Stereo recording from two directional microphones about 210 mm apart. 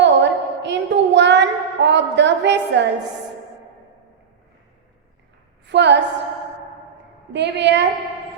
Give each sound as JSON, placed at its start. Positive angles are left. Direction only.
{"t": 0.0, "sound": "a sound", "side_deg": -55}
{"t": 5.6, "sound": "a woman's voice", "side_deg": -55}
{"t": 7.3, "sound": "a woman's voice", "side_deg": -55}